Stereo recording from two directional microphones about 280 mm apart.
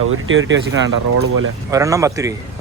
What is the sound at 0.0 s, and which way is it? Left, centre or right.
Speech, right.